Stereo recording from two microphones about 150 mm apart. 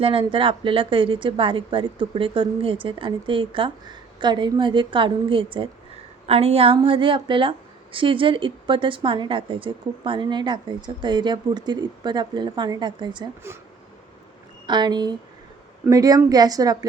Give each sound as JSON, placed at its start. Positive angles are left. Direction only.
{"t": 0.0, "sound": "a woman's voice", "side_deg": -35}
{"t": 14.7, "sound": "a woman's voice", "side_deg": -30}